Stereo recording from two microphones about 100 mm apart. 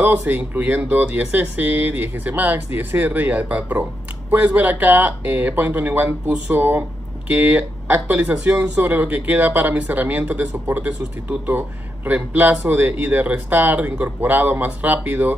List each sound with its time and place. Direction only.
0.0 s speech: 15° right (ahead or behind)